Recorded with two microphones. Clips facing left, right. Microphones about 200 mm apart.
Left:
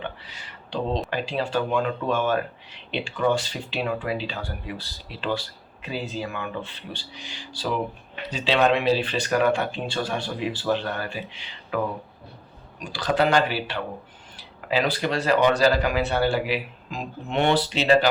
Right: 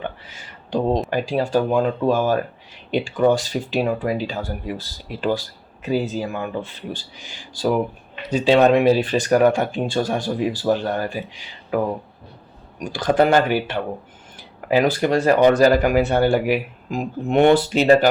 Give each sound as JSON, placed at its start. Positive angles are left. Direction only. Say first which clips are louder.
{"t": 0.0, "sound": "a sound", "louder": "right 4 dB", "side_deg": -45}
{"t": 1.1, "sound": "speech", "louder": "right 6 dB", "side_deg": -45}
{"t": 12.8, "sound": "speech", "louder": "right 5 dB", "side_deg": -50}